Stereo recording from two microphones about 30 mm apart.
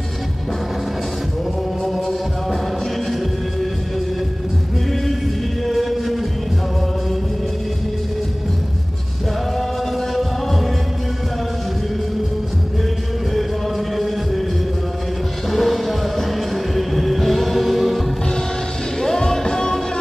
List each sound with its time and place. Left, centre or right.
5.7 s music: centre
10.1 s music: centre
13.3 s music: centre
15.5 s music: centre
18.9 s music: centre